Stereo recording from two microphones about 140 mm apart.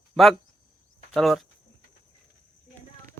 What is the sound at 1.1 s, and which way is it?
Speech, centre (ahead or behind).